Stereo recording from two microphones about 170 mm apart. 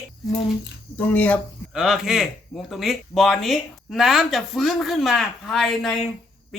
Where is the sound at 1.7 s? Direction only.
Centre (ahead or behind).